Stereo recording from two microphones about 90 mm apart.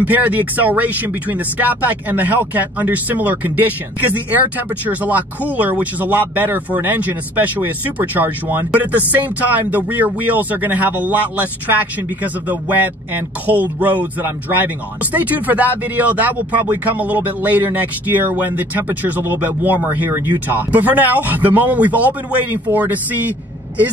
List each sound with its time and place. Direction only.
0.0 s speech: 20° right (ahead or behind)